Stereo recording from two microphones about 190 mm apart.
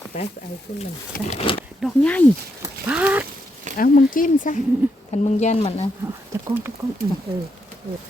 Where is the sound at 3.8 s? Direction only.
50° left (ahead or behind).